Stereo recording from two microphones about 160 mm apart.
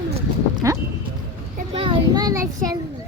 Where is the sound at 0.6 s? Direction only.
20° right (ahead or behind).